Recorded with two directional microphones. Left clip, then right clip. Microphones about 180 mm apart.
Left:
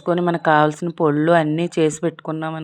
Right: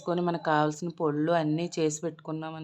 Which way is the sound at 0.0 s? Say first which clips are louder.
Left 10 dB; 30° left (ahead or behind).